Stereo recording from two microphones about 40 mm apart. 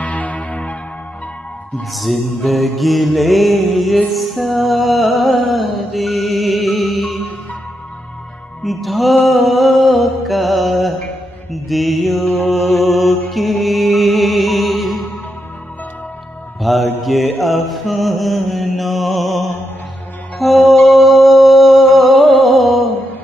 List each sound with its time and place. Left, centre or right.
0.0 s church bell: left
1.9 s mantra: centre
4.1 s music: centre
8.6 s music: centre
11.5 s mantra: centre
16.6 s mantra: centre
20.3 s music: centre